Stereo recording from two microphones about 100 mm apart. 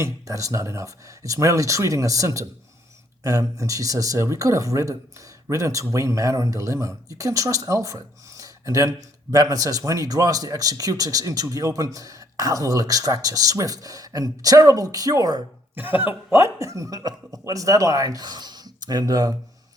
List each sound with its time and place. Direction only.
0.0 s speech: 35° right (ahead or behind)
15.7 s speech: 20° right (ahead or behind); by 19.4 s 40° right (ahead or behind)